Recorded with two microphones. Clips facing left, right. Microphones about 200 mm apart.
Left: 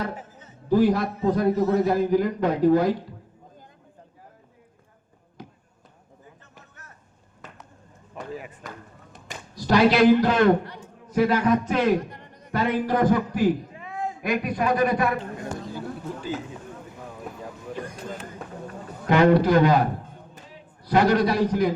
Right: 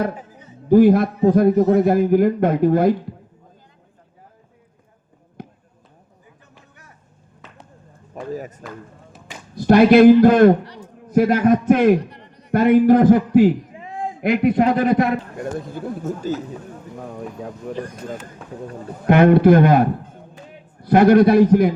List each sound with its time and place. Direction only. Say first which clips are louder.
0.2 s music: right 3 dB; 15° right (ahead or behind)
0.7 s a man's voice: right 8 dB; 55° right (ahead or behind)
5.4 s basketball bounce: right 6 dB; 55° right (ahead or behind)
8.1 s speech: right 7 dB; 40° right (ahead or behind)
9.6 s a man's voice: right 8 dB; 55° right (ahead or behind)
12.1 s a sound: right 1 dB; 50° left (ahead or behind)
12.5 s a man's voice: right 11 dB; 55° right (ahead or behind)
13.7 s a sound: right 3 dB; 25° right (ahead or behind)
14.2 s a man's voice: right 10 dB; 60° right (ahead or behind)
17.7 s a man's voice: right 6 dB; 60° right (ahead or behind)
19.0 s a man's voice: right 6 dB; 55° right (ahead or behind)